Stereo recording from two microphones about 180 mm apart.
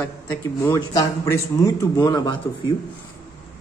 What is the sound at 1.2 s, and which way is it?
A man's voice, 20° left (ahead or behind).